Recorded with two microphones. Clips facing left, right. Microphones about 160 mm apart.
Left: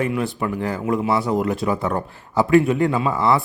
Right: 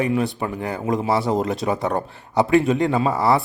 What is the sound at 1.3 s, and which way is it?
Speech, 20° right (ahead or behind).